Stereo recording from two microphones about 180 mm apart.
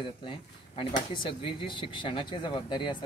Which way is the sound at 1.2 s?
30° left (ahead or behind).